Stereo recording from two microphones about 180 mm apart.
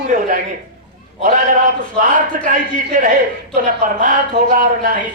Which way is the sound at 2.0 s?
45° right (ahead or behind).